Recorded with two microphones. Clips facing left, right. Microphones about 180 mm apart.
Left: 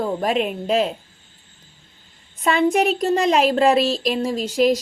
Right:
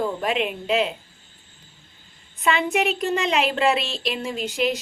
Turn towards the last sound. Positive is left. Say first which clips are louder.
# left 6 dB
turn(degrees=35)  # may be behind; listen again after turning